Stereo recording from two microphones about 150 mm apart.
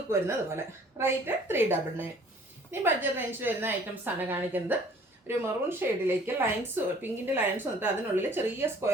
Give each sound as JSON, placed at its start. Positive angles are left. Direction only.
{"t": 0.1, "sound": "speech", "side_deg": -15}